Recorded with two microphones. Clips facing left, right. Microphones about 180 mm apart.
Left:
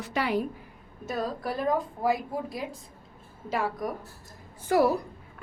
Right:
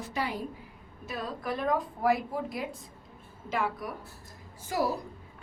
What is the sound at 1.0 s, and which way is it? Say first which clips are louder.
A woman's voice: left 4 dB; 40° left (ahead or behind).